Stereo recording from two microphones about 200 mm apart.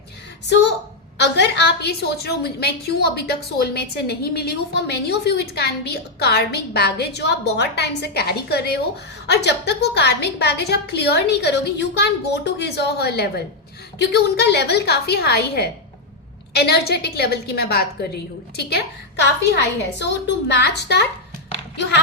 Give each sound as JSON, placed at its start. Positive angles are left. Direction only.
{"t": 0.4, "sound": "a woman's voice", "side_deg": 60}